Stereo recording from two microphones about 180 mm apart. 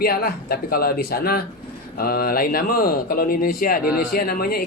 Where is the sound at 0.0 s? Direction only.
55° left (ahead or behind).